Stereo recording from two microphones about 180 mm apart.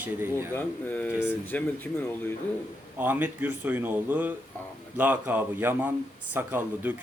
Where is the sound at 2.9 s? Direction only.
10° right (ahead or behind).